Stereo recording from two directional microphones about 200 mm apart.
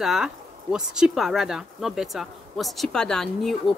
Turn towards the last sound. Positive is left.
turn(degrees=0)  # may be behind; listen again after turning